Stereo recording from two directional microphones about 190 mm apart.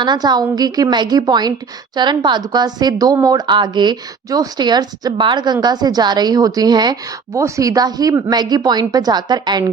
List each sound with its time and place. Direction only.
0.0 s speech: 20° right (ahead or behind)